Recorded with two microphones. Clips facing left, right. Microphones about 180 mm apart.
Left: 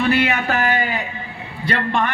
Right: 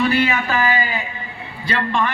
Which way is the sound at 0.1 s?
60° left (ahead or behind).